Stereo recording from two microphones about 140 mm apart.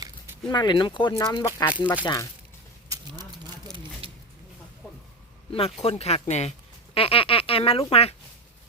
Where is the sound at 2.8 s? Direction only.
25° right (ahead or behind).